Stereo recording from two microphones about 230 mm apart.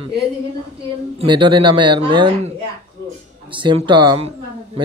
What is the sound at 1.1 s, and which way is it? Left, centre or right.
Speech, right.